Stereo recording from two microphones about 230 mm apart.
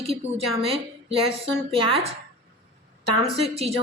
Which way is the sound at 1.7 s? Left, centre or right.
Right.